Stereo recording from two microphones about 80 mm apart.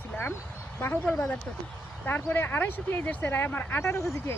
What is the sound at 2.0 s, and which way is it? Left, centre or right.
Speech, left.